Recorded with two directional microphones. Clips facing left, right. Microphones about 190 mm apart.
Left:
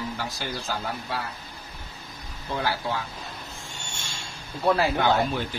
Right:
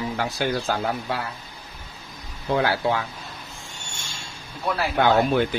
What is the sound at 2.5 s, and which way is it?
Speech, 65° right (ahead or behind).